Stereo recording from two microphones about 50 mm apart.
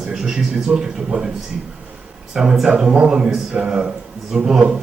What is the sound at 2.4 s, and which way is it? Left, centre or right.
A man's voice, centre.